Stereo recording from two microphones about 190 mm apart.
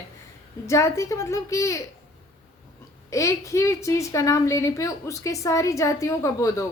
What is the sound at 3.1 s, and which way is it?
A woman's voice, 15° left (ahead or behind).